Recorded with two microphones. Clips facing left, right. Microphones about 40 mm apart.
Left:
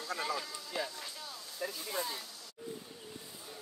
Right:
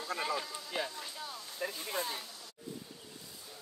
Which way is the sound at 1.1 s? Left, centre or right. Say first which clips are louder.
Right 2 dB; centre.